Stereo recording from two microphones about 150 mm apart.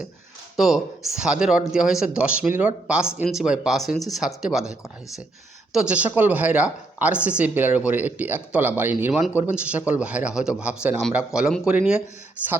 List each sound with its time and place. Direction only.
0.5 s a woman's voice: centre (ahead or behind)